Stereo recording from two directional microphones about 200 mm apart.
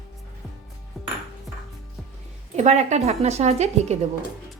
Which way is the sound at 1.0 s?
Centre (ahead or behind).